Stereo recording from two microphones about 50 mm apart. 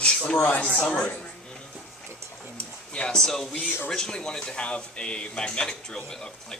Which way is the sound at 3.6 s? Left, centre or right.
Left.